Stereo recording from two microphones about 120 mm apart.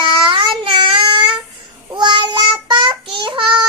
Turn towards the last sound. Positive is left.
turn(degrees=-45)  # may be behind; listen again after turning